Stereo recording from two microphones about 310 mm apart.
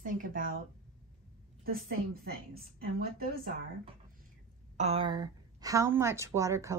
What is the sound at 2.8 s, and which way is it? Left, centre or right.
Speech, right.